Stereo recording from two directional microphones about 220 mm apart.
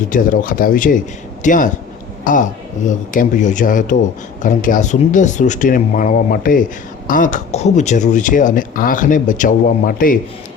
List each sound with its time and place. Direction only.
0.1 s a man's voice: 40° left (ahead or behind)